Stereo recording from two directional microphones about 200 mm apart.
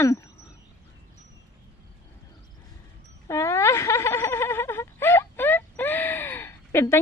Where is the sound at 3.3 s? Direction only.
15° left (ahead or behind).